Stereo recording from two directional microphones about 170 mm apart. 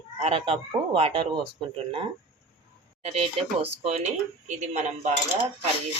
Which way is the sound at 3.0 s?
40° right (ahead or behind).